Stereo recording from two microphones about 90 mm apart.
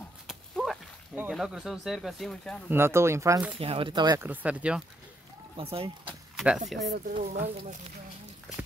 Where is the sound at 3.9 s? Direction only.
55° right (ahead or behind).